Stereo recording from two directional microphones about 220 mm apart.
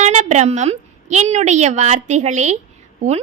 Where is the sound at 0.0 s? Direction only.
30° right (ahead or behind).